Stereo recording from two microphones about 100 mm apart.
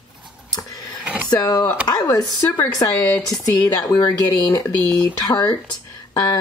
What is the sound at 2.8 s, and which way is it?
Speech, 40° left (ahead or behind).